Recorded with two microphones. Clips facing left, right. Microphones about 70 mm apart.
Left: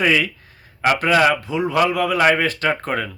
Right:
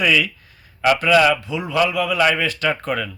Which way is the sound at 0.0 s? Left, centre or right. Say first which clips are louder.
Even; left.